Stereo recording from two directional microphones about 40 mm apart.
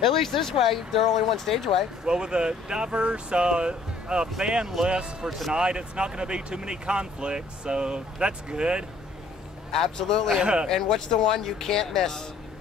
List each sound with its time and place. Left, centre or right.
0.1 s speech: centre
2.0 s speech: right
9.7 s speech: centre
10.3 s speech: right
10.7 s speech: centre